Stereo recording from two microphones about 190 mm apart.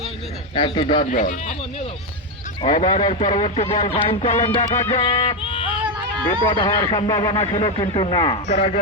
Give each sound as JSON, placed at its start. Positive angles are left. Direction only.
{"t": 0.5, "sound": "a man's voice", "side_deg": 25}
{"t": 1.1, "sound": "a man's voice", "side_deg": 40}